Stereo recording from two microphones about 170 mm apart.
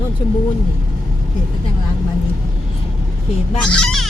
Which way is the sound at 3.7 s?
5° left (ahead or behind).